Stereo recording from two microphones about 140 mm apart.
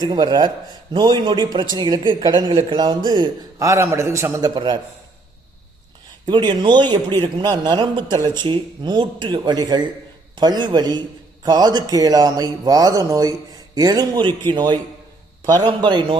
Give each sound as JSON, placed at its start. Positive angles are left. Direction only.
{"t": 0.0, "sound": "speech", "side_deg": -30}
{"t": 6.2, "sound": "speech", "side_deg": -35}